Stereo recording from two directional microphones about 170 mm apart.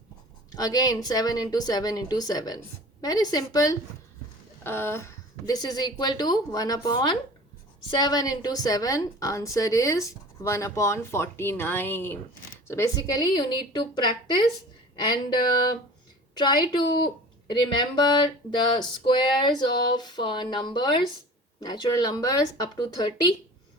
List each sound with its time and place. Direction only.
0.5 s a woman's voice: 20° left (ahead or behind)